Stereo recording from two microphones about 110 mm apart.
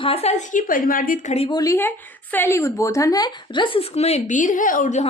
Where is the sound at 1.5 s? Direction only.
35° left (ahead or behind).